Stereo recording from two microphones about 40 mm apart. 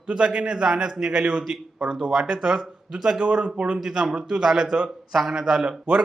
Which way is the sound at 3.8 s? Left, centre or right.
Centre.